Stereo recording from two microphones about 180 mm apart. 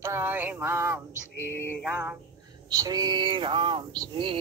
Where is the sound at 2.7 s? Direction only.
20° right (ahead or behind).